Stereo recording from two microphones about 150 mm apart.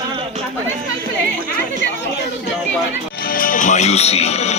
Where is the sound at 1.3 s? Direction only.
65° right (ahead or behind).